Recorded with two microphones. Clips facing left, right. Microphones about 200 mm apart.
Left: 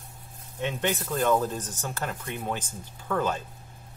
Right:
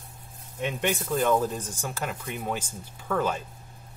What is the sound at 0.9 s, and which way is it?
Speech, 5° right (ahead or behind).